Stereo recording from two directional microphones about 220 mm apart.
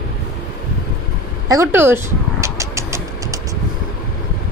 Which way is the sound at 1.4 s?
15° right (ahead or behind).